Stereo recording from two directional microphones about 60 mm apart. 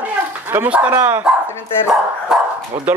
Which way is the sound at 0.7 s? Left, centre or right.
Right.